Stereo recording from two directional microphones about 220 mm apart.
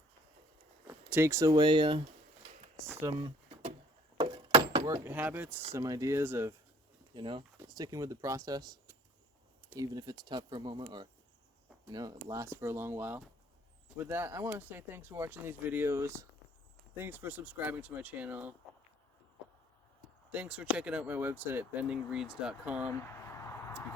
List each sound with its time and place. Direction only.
0.9 s speech: 10° right (ahead or behind)
2.8 s a sound: 15° right (ahead or behind)
4.2 s door: 20° right (ahead or behind)
4.9 s speech: 10° right (ahead or behind)
7.1 s speech: 20° right (ahead or behind)
20.3 s speech: 5° right (ahead or behind)